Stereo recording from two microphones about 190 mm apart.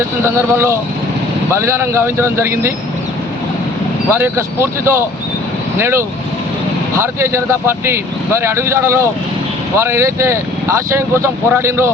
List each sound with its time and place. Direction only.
0.3 s speech: 15° right (ahead or behind)
4.1 s speech: 10° right (ahead or behind)